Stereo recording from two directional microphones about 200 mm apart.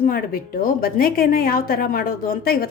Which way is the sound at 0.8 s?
50° left (ahead or behind).